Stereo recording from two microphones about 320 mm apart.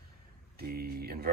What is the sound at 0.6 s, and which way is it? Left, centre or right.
Speech, right.